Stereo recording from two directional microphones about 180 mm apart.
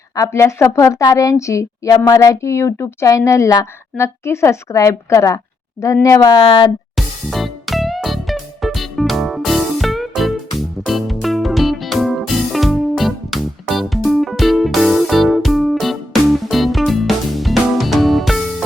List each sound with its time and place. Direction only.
0.2 s a woman's voice: 15° left (ahead or behind)
6.9 s music: centre (ahead or behind)